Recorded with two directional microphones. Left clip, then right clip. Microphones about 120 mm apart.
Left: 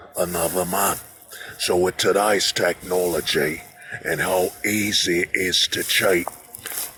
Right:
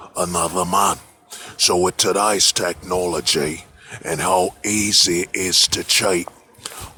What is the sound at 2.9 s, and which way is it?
Speech, 50° right (ahead or behind).